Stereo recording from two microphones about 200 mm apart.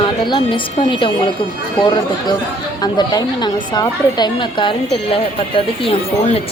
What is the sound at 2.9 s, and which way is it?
A woman's voice, 20° left (ahead or behind).